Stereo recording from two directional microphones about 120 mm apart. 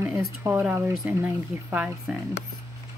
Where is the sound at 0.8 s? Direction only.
15° right (ahead or behind).